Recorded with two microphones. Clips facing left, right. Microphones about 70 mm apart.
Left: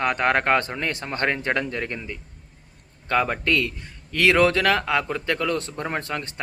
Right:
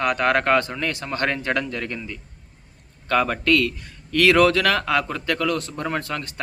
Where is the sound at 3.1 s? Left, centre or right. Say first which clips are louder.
Right 2 dB; centre.